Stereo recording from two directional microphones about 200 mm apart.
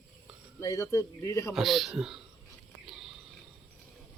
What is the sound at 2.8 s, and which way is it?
Cricket, centre (ahead or behind).